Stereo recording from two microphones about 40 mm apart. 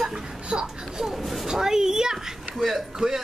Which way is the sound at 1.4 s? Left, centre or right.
Centre.